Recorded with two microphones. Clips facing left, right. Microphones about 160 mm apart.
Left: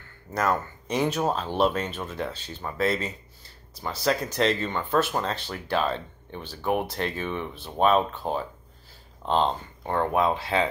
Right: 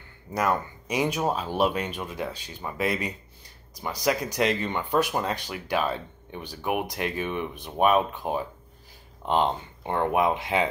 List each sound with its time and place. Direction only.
0.3 s speech: 10° right (ahead or behind)